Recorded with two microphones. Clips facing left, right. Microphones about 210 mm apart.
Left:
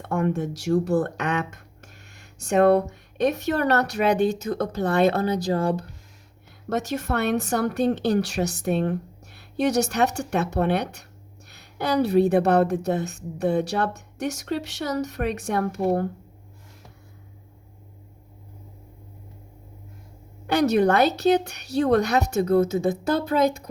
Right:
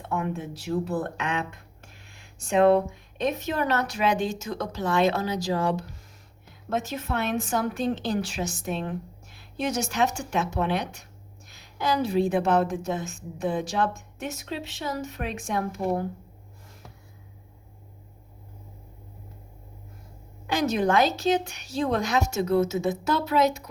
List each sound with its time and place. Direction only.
0.1 s speech: 45° left (ahead or behind)
0.3 s speech: 75° left (ahead or behind)
0.6 s speech: 45° left (ahead or behind)
0.9 s speech: 75° left (ahead or behind)
1.3 s a sound: 45° left (ahead or behind)
2.6 s speech: 65° left (ahead or behind)
6.7 s speech: 70° left (ahead or behind); by 9.0 s 55° left (ahead or behind)
9.6 s speech: 70° left (ahead or behind)
20.5 s speech: 65° left (ahead or behind)